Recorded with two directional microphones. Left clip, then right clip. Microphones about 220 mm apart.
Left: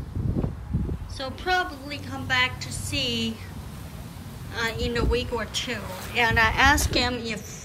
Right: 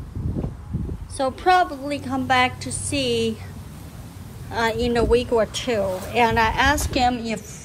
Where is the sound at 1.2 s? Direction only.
20° right (ahead or behind).